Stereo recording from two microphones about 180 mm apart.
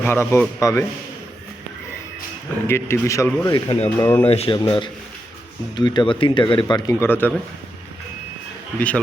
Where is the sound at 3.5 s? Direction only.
30° left (ahead or behind).